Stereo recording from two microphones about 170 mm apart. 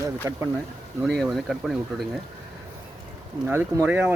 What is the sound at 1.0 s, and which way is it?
Speech, centre (ahead or behind).